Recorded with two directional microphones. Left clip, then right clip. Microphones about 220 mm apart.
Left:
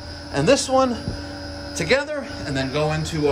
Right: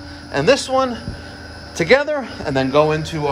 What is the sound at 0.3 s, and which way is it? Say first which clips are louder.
Speech: right 2 dB; 15° left (ahead or behind).